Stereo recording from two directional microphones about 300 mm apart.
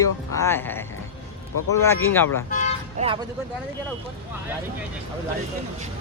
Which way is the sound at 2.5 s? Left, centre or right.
Left.